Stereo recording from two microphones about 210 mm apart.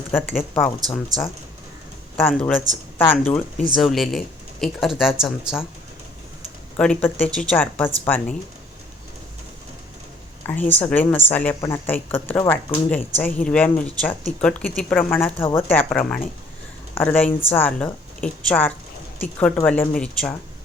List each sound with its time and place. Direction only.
0.1 s speech: 5° left (ahead or behind)
6.7 s speech: 5° left (ahead or behind)
10.4 s speech: 10° left (ahead or behind)
15.4 s speech: 25° left (ahead or behind)
15.7 s speech: 5° left (ahead or behind)